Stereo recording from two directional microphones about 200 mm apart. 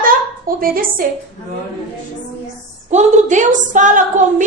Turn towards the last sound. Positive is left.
turn(degrees=-40)  # may be behind; listen again after turning